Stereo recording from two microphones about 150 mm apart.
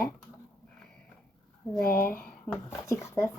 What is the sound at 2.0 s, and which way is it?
Speech, 15° left (ahead or behind).